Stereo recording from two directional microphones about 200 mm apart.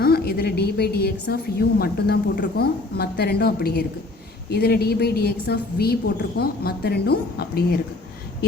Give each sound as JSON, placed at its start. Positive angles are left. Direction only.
{"t": 0.0, "sound": "a woman's voice", "side_deg": 50}